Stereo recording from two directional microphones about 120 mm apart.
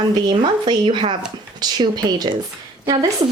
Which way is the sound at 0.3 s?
40° right (ahead or behind).